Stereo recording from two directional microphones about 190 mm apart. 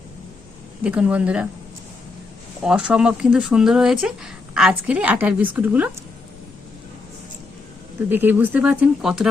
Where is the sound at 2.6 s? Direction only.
5° right (ahead or behind).